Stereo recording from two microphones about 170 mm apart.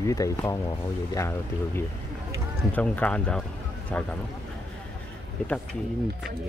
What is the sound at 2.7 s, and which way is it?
Speech, 10° left (ahead or behind).